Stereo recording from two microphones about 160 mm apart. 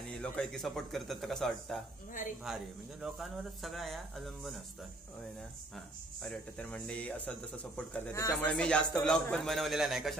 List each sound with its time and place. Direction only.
0.2 s speech: 5° left (ahead or behind)
6.2 s speech: 5° left (ahead or behind)
8.1 s speech: 20° left (ahead or behind)
8.5 s speech: 5° left (ahead or behind)